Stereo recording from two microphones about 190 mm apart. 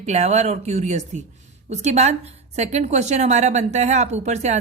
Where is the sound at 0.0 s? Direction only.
35° right (ahead or behind).